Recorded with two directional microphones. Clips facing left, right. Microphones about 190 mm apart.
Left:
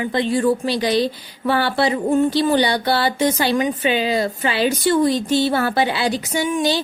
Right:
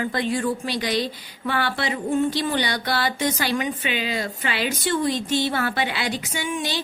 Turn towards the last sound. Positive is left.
turn(degrees=35)  # may be behind; listen again after turning